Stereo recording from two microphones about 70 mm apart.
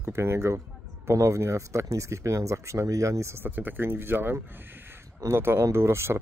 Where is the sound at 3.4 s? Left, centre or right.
Right.